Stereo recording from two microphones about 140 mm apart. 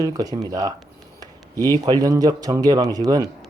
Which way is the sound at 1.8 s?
25° right (ahead or behind).